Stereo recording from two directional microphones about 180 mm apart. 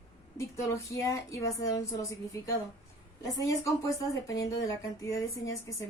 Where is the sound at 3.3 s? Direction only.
20° left (ahead or behind).